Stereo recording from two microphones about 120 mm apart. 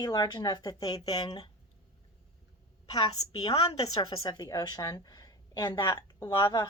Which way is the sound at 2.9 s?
35° left (ahead or behind).